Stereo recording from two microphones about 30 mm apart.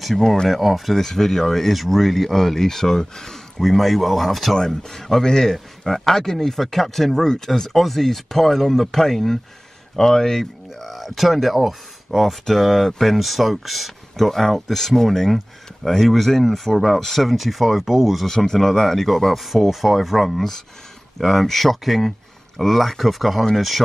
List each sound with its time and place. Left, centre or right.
0.1 s speech: centre
1.0 s speech: centre
3.6 s speech: centre
4.6 s speech: centre
10.8 s speech: centre
14.1 s speech: centre
18.3 s speech: centre